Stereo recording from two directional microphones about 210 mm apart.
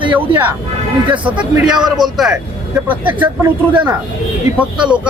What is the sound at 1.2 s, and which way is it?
Speech, 5° right (ahead or behind).